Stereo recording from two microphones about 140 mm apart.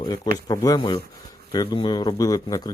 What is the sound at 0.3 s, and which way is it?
Speech, 25° left (ahead or behind).